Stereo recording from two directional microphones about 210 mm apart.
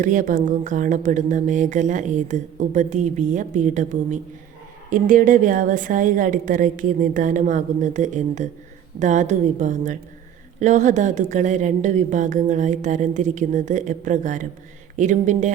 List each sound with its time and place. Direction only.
0.0 s speech: 40° right (ahead or behind)